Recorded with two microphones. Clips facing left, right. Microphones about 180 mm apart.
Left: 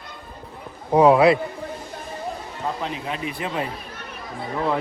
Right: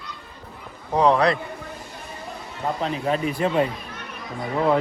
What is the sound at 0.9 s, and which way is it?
Speech, 10° left (ahead or behind).